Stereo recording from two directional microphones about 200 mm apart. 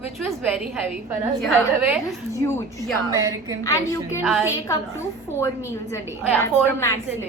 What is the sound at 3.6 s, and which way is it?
Speech, 15° left (ahead or behind).